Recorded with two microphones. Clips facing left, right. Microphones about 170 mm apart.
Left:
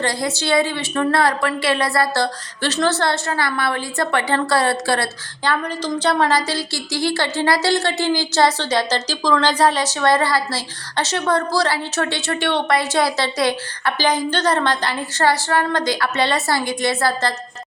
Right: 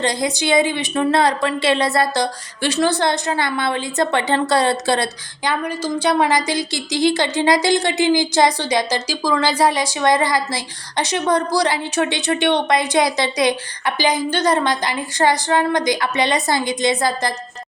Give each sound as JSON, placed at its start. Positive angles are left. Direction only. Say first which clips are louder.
{"t": 0.0, "sound": "a woman's voice", "louder": "right 2 dB", "side_deg": -20}
{"t": 5.5, "sound": "a woman's voice", "louder": "even", "side_deg": -10}